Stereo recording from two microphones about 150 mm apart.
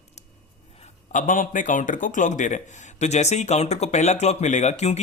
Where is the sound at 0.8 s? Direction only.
60° left (ahead or behind).